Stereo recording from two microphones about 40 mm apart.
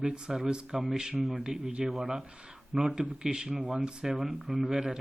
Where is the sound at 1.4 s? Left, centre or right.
Centre.